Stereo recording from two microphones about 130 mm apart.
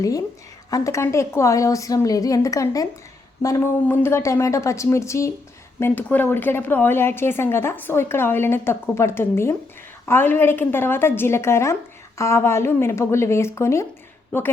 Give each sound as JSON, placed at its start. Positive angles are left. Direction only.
{"t": 0.7, "sound": "a woman's voice", "side_deg": 25}
{"t": 3.8, "sound": "a woman's voice", "side_deg": 15}